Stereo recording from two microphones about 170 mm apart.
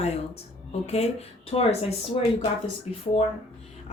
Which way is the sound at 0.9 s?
40° left (ahead or behind).